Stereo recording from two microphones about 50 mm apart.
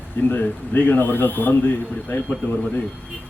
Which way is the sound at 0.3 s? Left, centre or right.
Left.